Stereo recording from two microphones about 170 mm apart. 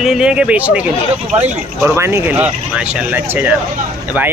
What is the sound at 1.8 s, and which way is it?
Speech, 15° right (ahead or behind).